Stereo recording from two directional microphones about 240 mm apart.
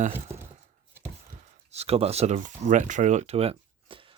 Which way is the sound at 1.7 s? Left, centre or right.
Right.